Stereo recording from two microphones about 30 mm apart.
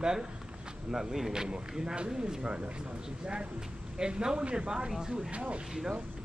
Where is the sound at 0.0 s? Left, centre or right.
Centre.